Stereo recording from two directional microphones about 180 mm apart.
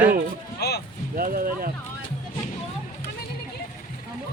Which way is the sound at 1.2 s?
55° right (ahead or behind).